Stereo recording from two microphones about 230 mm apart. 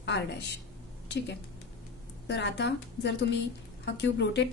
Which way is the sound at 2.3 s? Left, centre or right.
Left.